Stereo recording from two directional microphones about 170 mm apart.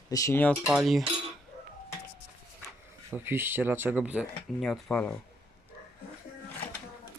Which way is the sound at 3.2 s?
10° right (ahead or behind).